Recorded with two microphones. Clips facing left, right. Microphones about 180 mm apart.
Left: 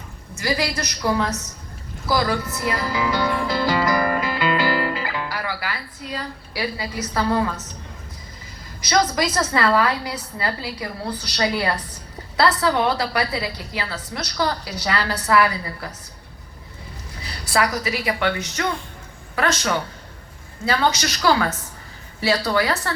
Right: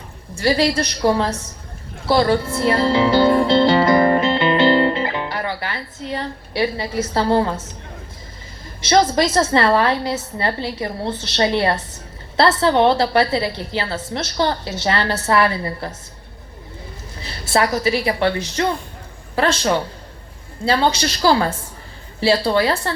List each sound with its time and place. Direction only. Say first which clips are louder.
0.3 s a woman's voice: right 7 dB; 30° right (ahead or behind)
8.8 s a woman's voice: right 5 dB; 25° right (ahead or behind)
17.2 s a woman's voice: right 3 dB; 25° right (ahead or behind)